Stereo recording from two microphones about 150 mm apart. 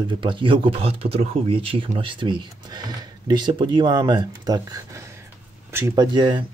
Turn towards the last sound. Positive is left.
turn(degrees=-30)  # may be behind; listen again after turning